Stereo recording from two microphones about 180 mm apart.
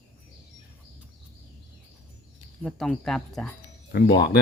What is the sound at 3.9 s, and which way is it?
Speech, 70° left (ahead or behind).